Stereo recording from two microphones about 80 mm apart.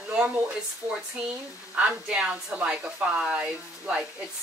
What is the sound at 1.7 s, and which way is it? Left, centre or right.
Speech, centre.